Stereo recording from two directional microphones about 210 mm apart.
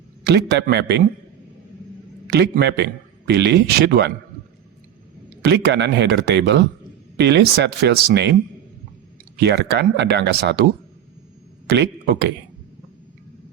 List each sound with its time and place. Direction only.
0.3 s a man's voice: 50° right (ahead or behind)
2.3 s a man's voice: 55° right (ahead or behind)
5.5 s a man's voice: 55° right (ahead or behind)
9.4 s a man's voice: 55° right (ahead or behind)
11.7 s speech: 55° right (ahead or behind)